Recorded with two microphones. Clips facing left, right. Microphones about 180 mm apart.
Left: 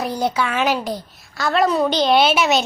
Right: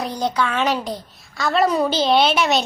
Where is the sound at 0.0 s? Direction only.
5° left (ahead or behind).